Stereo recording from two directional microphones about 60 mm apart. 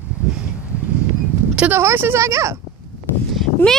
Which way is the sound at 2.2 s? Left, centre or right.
Right.